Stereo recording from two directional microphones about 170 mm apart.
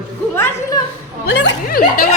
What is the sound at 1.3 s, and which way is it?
Speech, 80° left.